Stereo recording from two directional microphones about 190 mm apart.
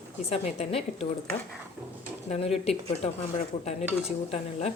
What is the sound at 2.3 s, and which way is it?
Speech, 30° left (ahead or behind).